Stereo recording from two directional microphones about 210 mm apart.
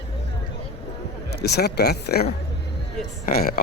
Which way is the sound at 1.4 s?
50° left (ahead or behind).